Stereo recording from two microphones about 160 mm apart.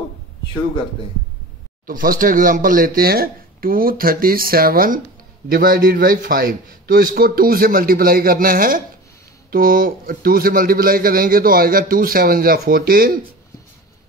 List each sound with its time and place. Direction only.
1.9 s a man's voice: 60° right (ahead or behind)